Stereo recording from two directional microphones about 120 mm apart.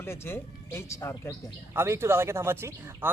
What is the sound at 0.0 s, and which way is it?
Speech, 20° left (ahead or behind).